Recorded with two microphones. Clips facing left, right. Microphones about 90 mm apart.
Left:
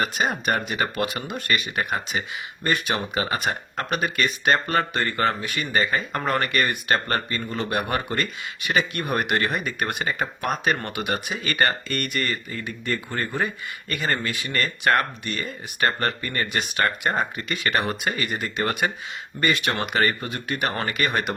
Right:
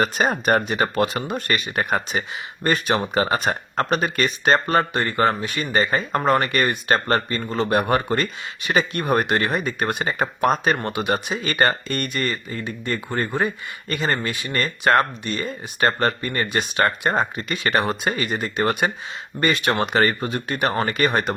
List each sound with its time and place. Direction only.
0.0 s speech: 40° right (ahead or behind)
6.2 s speech: 25° right (ahead or behind)